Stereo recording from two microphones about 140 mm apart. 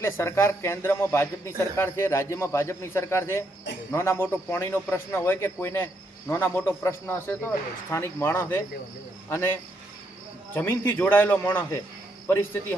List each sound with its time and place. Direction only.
0.0 s speech: 20° left (ahead or behind)